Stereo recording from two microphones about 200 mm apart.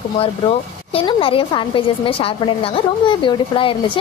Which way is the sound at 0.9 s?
25° left (ahead or behind).